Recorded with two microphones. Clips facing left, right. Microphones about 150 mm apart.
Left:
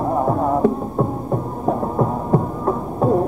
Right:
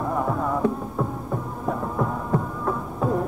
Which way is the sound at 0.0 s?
35° left (ahead or behind).